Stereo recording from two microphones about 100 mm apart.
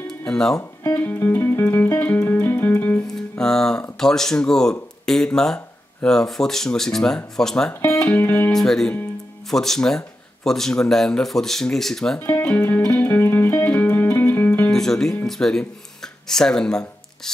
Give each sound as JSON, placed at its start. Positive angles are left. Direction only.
{"t": 0.2, "sound": "speech", "side_deg": 5}
{"t": 0.9, "sound": "music", "side_deg": 20}
{"t": 3.1, "sound": "music", "side_deg": 5}
{"t": 4.0, "sound": "speech", "side_deg": 5}
{"t": 7.8, "sound": "speech", "side_deg": 30}
{"t": 8.5, "sound": "speech", "side_deg": 5}
{"t": 12.2, "sound": "speech", "side_deg": 20}
{"t": 13.0, "sound": "music", "side_deg": 20}
{"t": 14.7, "sound": "music", "side_deg": 5}
{"t": 15.2, "sound": "speech", "side_deg": 5}